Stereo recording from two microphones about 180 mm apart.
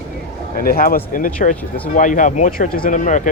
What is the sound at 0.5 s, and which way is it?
Speech, 55° left (ahead or behind).